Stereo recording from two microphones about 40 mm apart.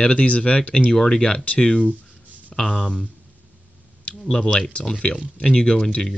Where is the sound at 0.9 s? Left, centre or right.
Centre.